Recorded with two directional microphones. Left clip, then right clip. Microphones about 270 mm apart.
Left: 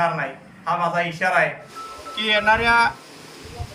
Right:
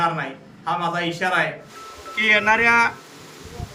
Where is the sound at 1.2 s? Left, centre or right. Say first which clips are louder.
Left 1 dB; centre.